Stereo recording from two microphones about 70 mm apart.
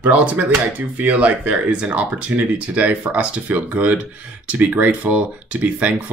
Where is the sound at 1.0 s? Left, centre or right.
Right.